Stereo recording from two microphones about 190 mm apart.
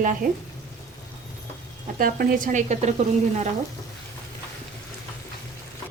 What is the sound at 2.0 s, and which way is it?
Speech, 50° right (ahead or behind).